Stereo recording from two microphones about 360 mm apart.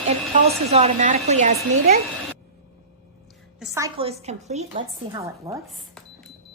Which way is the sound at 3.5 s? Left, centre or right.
Centre.